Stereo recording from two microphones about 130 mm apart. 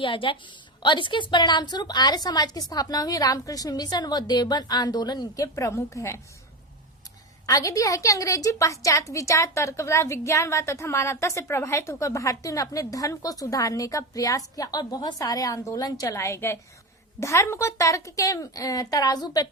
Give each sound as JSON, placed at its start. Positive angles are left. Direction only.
{"t": 0.0, "sound": "a woman's voice", "side_deg": 40}
{"t": 7.4, "sound": "a woman's voice", "side_deg": 25}